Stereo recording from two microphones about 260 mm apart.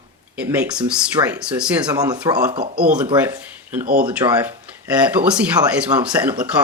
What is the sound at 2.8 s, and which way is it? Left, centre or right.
Speech, centre.